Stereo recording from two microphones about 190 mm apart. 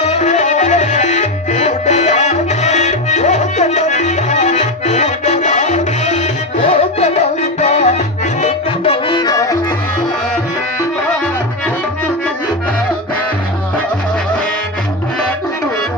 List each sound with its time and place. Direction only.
0.0 s music: 35° left (ahead or behind); by 9.6 s 20° left (ahead or behind)